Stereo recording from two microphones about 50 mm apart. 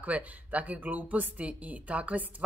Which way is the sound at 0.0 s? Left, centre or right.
Right.